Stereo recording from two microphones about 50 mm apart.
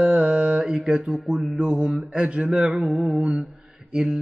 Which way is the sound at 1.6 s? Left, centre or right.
Right.